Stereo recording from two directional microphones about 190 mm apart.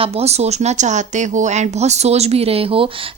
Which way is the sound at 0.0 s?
35° right (ahead or behind).